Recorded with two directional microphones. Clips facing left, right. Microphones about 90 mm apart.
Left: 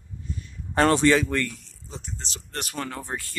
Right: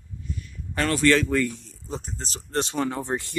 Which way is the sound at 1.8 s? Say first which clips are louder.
Right 5 dB; 45° right (ahead or behind).